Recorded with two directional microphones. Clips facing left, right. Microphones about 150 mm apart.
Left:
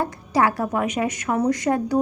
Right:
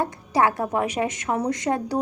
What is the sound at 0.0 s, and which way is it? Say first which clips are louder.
Speech: left 1 dB; 25° right (ahead or behind).